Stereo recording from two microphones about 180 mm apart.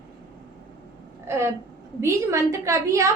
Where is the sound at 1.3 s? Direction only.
15° right (ahead or behind).